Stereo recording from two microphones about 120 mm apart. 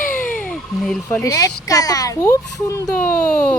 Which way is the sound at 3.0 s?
10° left (ahead or behind).